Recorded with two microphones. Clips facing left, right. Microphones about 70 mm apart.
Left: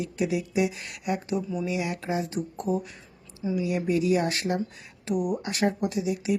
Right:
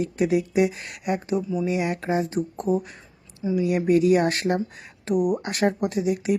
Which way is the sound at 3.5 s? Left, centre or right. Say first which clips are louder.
Right 6 dB; right.